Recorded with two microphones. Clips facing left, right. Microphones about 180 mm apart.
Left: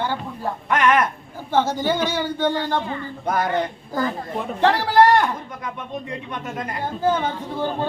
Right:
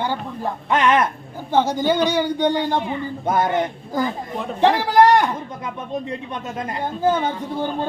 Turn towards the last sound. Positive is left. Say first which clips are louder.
# right 2 dB
turn(degrees=-15)  # may be behind; listen again after turning